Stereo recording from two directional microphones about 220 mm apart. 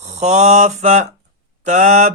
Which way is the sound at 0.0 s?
30° right (ahead or behind).